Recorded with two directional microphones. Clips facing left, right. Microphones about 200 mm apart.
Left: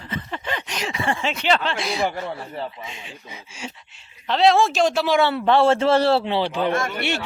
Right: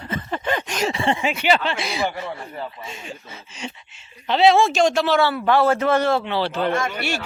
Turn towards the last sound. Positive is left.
turn(degrees=20)  # may be behind; listen again after turning